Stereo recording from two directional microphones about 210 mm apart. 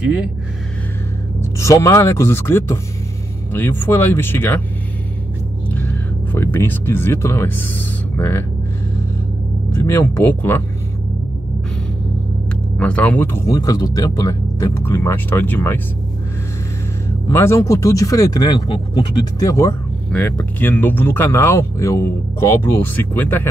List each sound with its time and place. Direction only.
0.0 s speech: 5° right (ahead or behind)
1.6 s speech: 15° left (ahead or behind)
6.3 s speech: 10° left (ahead or behind)
9.8 s speech: 10° left (ahead or behind)
12.7 s speech: 5° left (ahead or behind)
17.3 s speech: 10° left (ahead or behind)